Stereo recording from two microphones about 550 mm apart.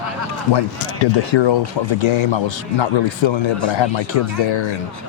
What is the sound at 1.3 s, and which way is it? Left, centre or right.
Speech, left.